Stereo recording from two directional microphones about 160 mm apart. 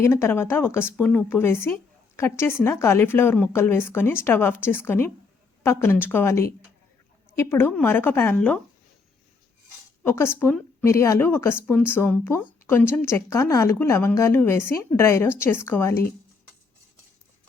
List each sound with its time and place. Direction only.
0.0 s a woman's voice: 15° left (ahead or behind)
10.0 s a woman's voice: 15° left (ahead or behind)